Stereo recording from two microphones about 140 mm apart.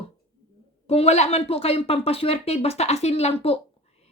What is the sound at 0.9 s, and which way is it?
Speech, 45° left (ahead or behind).